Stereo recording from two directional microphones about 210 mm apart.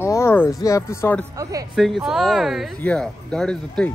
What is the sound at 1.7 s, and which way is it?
Speech, centre (ahead or behind).